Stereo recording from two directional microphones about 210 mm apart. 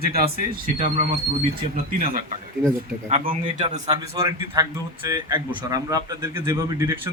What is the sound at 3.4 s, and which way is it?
A man's voice, 20° right (ahead or behind).